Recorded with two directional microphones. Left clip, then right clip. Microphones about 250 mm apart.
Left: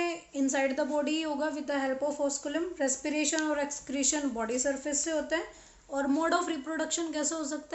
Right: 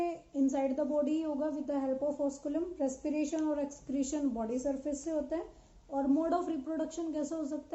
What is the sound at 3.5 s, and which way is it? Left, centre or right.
Speech, centre.